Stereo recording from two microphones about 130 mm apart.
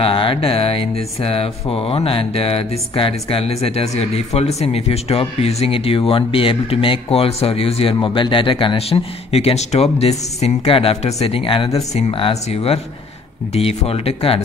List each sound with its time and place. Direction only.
0.0 s speech: 45° left (ahead or behind)